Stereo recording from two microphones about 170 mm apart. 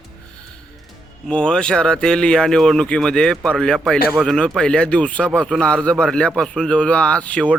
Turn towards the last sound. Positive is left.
turn(degrees=5)  # may be behind; listen again after turning